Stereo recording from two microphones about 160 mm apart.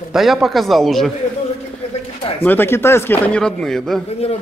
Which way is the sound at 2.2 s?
35° left (ahead or behind).